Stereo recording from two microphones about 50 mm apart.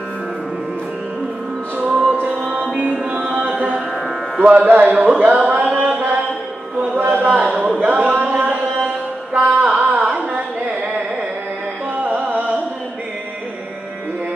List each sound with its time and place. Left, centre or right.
1.9 s music: right
4.5 s a sound: right
7.3 s a man's voice: right
8.1 s a sound: right
9.3 s music: right
9.8 s carnatic music: right
12.0 s music: right